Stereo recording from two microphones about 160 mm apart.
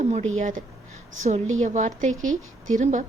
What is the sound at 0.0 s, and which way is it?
Speech, 45° right (ahead or behind).